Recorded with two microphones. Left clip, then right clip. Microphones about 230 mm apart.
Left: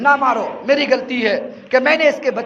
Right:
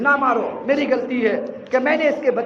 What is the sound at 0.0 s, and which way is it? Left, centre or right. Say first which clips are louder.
A man's voice: left 3 dB; left.